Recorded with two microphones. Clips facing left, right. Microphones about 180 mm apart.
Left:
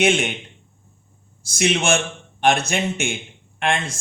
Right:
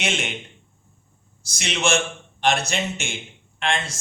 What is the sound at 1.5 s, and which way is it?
Speech, 55° left (ahead or behind).